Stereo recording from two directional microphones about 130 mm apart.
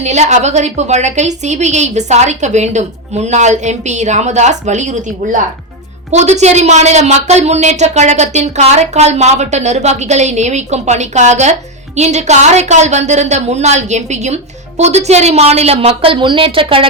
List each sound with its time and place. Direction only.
0.0 s speech: 60° right (ahead or behind)
6.1 s a woman's voice: 60° right (ahead or behind); by 16.8 s 45° right (ahead or behind)